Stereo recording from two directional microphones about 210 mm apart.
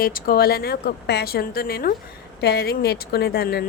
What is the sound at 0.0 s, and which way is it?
A woman's voice, 45° left (ahead or behind).